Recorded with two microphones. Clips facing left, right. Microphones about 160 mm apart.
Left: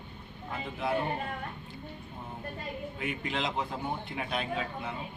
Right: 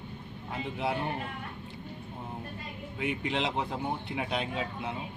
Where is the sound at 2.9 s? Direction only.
20° right (ahead or behind).